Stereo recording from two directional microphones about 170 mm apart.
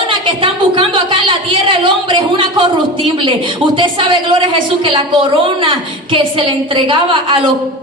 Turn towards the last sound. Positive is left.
turn(degrees=-30)  # may be behind; listen again after turning